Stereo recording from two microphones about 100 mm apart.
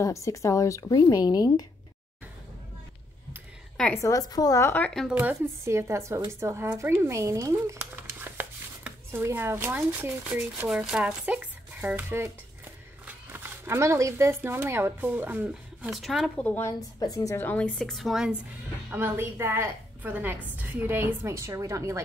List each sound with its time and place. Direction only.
0.0 s speech: 30° left (ahead or behind)
3.7 s a woman's voice: 5° left (ahead or behind)
4.0 s speech: 35° left (ahead or behind)
5.0 s speech: 15° right (ahead or behind)
5.7 s a woman's voice: 30° right (ahead or behind)
15.9 s speech: centre (ahead or behind)
16.3 s a woman's voice: 15° left (ahead or behind)
17.0 s speech: 35° left (ahead or behind)
17.4 s a woman's voice: 15° left (ahead or behind); by 18.3 s centre (ahead or behind)
18.9 s a woman's voice: 20° right (ahead or behind)